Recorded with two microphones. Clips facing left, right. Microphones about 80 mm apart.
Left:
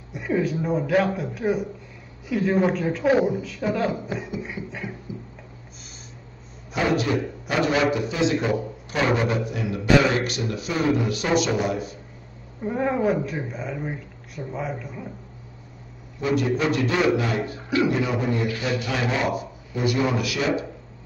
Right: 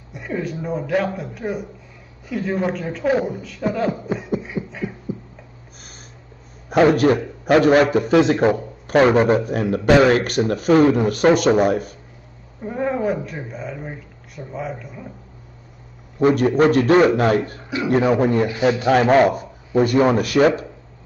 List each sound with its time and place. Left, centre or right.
0.1 s speech: centre
4.6 s beatboxing: right
5.1 s a sound: right
6.7 s a man's voice: right
12.6 s speech: centre
16.2 s a man's voice: right